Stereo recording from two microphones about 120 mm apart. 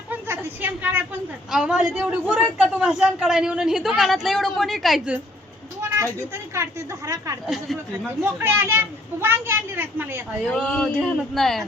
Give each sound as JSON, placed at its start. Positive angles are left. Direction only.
{"t": 0.1, "sound": "a sound", "side_deg": -15}
{"t": 1.5, "sound": "speech", "side_deg": -5}
{"t": 5.9, "sound": "speech", "side_deg": -20}
{"t": 7.4, "sound": "speech", "side_deg": 0}
{"t": 8.2, "sound": "speech", "side_deg": -20}
{"t": 10.5, "sound": "speech", "side_deg": 10}